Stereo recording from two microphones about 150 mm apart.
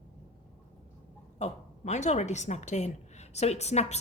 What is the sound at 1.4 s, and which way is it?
A woman's voice, 50° left (ahead or behind).